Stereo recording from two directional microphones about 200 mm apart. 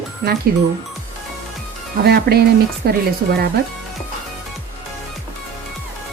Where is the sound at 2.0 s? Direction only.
50° right (ahead or behind).